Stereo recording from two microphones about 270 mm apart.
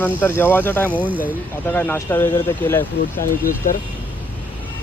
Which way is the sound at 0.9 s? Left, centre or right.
Centre.